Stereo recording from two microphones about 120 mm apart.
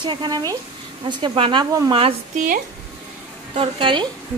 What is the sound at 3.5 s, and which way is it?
Speech, 45° right (ahead or behind).